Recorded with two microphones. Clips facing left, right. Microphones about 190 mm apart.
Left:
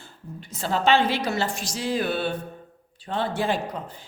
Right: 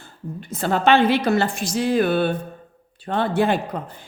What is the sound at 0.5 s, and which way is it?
A woman's voice, 55° right (ahead or behind).